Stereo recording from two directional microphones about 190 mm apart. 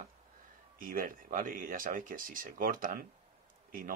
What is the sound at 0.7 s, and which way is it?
Speech, 50° right (ahead or behind).